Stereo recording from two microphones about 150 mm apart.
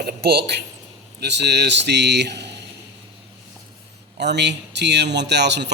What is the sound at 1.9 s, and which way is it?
Speech, 90° right.